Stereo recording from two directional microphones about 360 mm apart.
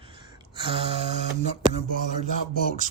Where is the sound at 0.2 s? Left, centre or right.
Centre.